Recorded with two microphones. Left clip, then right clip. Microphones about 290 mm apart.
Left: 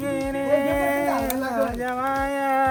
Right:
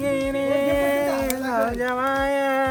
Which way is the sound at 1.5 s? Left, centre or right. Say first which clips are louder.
Right 5 dB; right.